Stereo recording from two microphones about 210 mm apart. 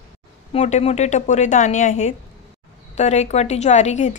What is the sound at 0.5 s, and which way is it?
Speech, 30° left (ahead or behind).